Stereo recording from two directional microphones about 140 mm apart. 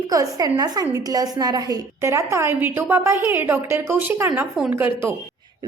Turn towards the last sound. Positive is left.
turn(degrees=-15)  # may be behind; listen again after turning